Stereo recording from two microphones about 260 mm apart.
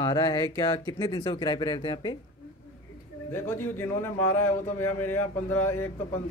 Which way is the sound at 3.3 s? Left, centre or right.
Centre.